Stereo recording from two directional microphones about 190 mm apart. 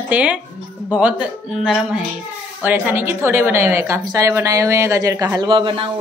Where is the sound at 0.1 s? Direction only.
5° right (ahead or behind).